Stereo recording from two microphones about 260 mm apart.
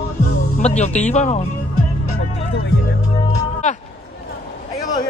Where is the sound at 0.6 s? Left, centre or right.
Left.